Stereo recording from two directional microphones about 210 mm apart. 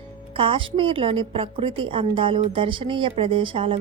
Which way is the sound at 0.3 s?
25° right (ahead or behind).